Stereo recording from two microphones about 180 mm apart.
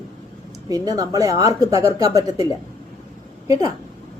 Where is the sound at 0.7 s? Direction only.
20° right (ahead or behind).